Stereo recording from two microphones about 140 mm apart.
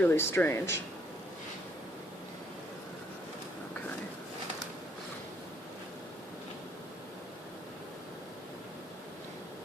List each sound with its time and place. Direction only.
0.0 s speech: 15° left (ahead or behind)